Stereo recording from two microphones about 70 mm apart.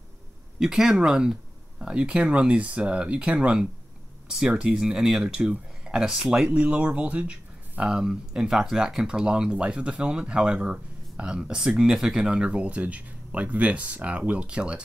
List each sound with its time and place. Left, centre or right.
0.6 s speech: centre
4.8 s speech: centre